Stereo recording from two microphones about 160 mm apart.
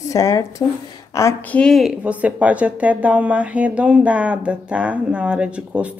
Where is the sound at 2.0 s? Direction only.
10° right (ahead or behind).